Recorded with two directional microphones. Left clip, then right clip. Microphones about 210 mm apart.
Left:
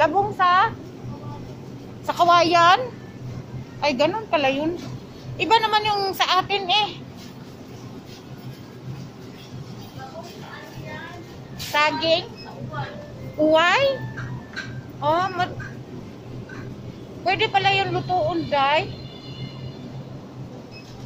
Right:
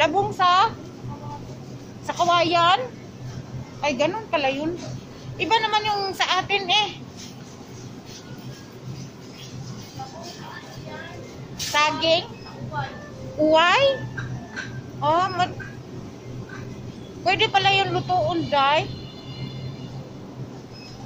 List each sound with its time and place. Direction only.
0.0 s a sound: centre (ahead or behind)
2.0 s a woman's voice: 20° left (ahead or behind)
3.8 s a woman's voice: 20° left (ahead or behind)
11.7 s a woman's voice: centre (ahead or behind)
13.5 s a woman's voice: 5° right (ahead or behind)
15.0 s a woman's voice: centre (ahead or behind)
17.2 s a woman's voice: 10° right (ahead or behind)